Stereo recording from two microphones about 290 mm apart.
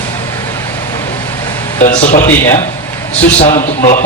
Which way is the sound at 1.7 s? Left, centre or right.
Left.